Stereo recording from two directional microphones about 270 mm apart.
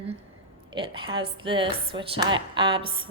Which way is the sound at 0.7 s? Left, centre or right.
Centre.